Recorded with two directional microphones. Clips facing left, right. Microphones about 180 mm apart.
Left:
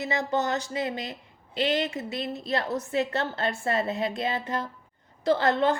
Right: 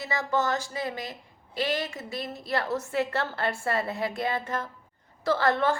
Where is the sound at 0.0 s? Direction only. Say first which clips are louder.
Left 1 dB; 20° left (ahead or behind).